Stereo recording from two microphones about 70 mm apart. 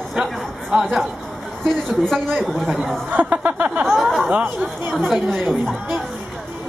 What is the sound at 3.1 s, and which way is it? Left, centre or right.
Speech, right.